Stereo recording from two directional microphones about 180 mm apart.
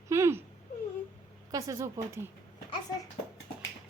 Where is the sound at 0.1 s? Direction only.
15° right (ahead or behind).